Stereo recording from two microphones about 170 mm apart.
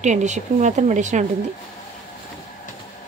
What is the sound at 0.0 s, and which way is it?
A woman's voice, 45° right (ahead or behind).